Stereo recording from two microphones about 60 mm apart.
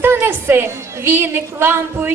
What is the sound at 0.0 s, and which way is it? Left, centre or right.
A woman's voice, right.